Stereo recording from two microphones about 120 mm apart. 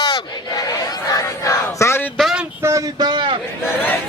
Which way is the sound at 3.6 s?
20° left (ahead or behind).